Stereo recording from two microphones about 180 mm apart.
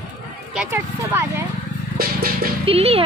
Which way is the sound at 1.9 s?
55° right (ahead or behind).